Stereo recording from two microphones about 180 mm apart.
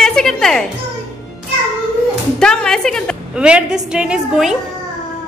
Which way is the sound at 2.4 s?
5° left (ahead or behind).